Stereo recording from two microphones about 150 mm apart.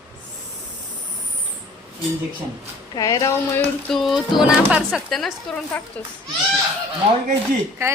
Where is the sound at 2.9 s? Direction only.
25° left (ahead or behind).